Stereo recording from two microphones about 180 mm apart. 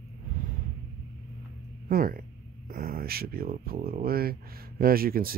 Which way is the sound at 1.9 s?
55° right (ahead or behind).